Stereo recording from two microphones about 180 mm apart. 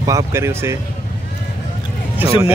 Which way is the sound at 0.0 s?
15° right (ahead or behind).